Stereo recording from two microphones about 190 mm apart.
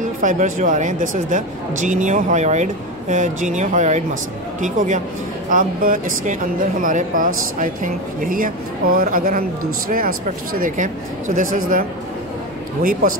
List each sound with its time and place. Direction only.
0.2 s speech: 45° right (ahead or behind)